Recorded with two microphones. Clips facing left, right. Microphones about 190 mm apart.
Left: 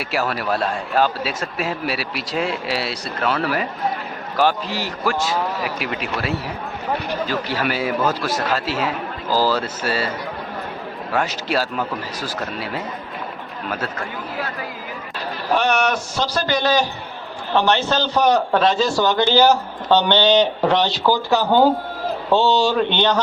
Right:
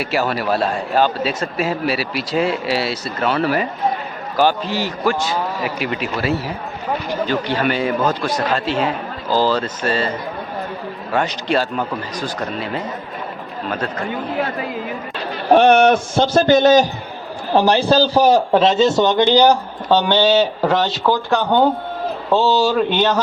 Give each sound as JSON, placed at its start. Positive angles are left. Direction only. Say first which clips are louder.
{"t": 0.0, "sound": "a man's voice", "louder": "right 3 dB", "side_deg": 0}
{"t": 7.6, "sound": "a man's voice", "louder": "right 1 dB", "side_deg": 5}
{"t": 11.1, "sound": "a man's voice", "louder": "right 3 dB", "side_deg": 5}
{"t": 15.4, "sound": "a man's voice", "louder": "right 8 dB", "side_deg": -55}
{"t": 17.5, "sound": "a man's voice", "louder": "right 4 dB", "side_deg": -35}